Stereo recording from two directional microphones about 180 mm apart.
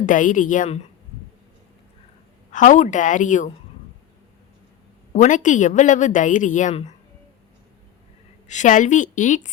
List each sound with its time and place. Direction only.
0.0 s a woman's voice: 45° left (ahead or behind)
2.5 s a woman's voice: 45° left (ahead or behind)
5.1 s a woman's voice: 45° left (ahead or behind)
8.4 s a woman's voice: 40° left (ahead or behind)